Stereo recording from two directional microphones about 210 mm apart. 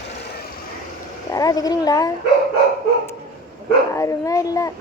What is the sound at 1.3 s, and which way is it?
Speech, 15° left (ahead or behind).